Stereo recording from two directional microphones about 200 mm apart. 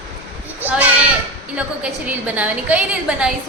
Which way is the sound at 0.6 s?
10° right (ahead or behind).